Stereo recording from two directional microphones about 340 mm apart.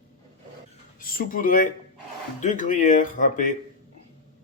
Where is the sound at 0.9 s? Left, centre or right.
Left.